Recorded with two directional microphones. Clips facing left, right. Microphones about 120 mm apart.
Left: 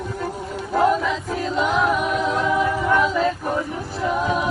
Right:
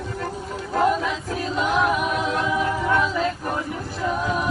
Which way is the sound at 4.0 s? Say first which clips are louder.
Left 3 dB; 5° left (ahead or behind).